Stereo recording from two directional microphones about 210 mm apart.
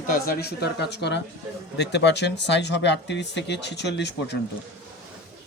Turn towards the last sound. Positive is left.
turn(degrees=55)  # may be behind; listen again after turning